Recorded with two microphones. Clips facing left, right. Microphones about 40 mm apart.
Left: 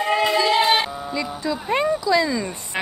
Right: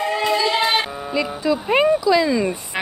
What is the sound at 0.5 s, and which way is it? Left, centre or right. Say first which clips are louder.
Music: left 1 dB; centre.